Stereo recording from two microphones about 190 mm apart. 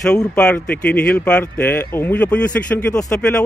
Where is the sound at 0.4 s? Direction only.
5° left (ahead or behind).